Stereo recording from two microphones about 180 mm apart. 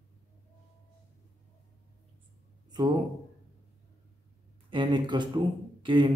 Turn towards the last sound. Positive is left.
turn(degrees=-25)  # may be behind; listen again after turning